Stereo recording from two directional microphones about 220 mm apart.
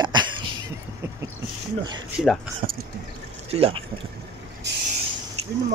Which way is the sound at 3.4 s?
25° right (ahead or behind).